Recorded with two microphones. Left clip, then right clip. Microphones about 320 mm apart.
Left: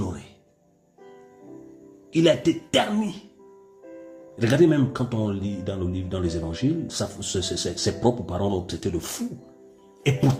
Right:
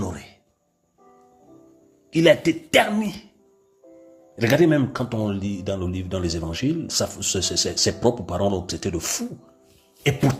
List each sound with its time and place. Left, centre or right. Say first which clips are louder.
0.0 s music: right 2 dB; centre
2.1 s speech: right 3 dB; centre
4.4 s speech: right 2 dB; centre